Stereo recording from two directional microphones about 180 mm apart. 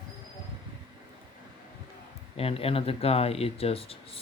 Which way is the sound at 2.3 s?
30° left (ahead or behind).